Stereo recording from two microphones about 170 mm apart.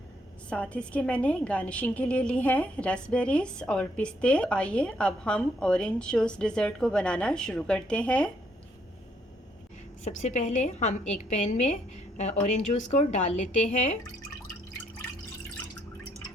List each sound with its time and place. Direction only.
0.5 s a woman's voice: 5° left (ahead or behind)
10.0 s a woman's voice: 45° left (ahead or behind)